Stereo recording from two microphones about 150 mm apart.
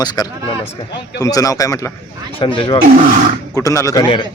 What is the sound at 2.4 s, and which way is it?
Speech, 35° left (ahead or behind).